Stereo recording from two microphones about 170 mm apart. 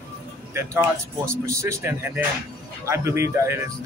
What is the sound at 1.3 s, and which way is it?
Speech, 15° right (ahead or behind).